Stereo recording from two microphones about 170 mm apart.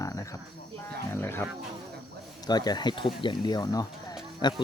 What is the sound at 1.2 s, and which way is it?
Speech, 15° left (ahead or behind).